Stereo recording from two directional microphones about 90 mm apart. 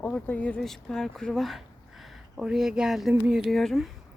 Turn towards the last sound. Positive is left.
turn(degrees=0)  # may be behind; listen again after turning